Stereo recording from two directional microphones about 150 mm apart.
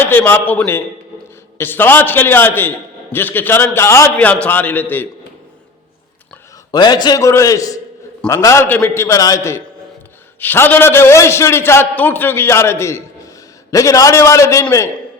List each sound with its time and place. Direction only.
0.0 s a man's voice: 15° left (ahead or behind)
6.7 s a man's voice: 30° left (ahead or behind)